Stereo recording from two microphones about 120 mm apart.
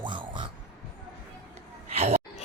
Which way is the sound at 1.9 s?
60° right (ahead or behind).